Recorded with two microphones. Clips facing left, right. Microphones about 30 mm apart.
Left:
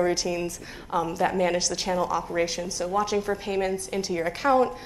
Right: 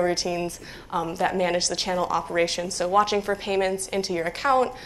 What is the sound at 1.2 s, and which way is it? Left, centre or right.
Speech, right.